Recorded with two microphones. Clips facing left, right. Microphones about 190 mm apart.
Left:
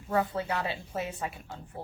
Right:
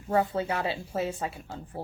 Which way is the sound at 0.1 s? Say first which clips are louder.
Right 3 dB; 25° right (ahead or behind).